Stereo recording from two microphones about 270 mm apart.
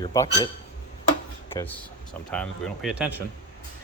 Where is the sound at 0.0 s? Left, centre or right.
Centre.